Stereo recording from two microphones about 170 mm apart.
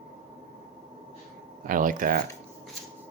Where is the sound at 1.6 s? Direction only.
55° right (ahead or behind).